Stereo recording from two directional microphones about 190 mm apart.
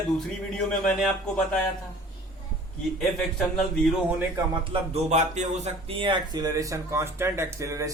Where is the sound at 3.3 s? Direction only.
Centre (ahead or behind).